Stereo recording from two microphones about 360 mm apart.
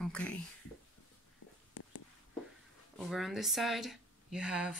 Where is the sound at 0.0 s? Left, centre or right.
Centre.